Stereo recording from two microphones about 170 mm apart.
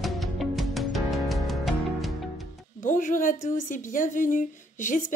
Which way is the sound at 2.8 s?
50° left (ahead or behind).